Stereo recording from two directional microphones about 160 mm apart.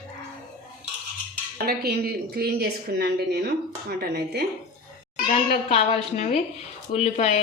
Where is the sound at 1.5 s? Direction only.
75° right (ahead or behind).